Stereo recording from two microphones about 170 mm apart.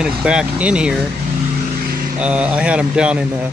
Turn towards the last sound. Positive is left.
turn(degrees=-10)  # may be behind; listen again after turning